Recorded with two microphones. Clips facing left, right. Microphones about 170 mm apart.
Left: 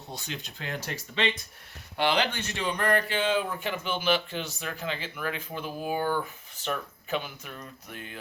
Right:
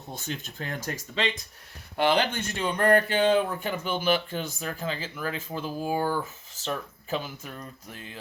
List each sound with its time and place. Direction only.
0.1 s speech: 50° right (ahead or behind); by 8.2 s 30° right (ahead or behind)